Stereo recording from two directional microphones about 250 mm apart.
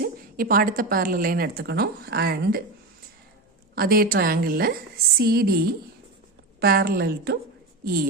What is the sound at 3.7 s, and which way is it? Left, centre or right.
A woman's voice, right.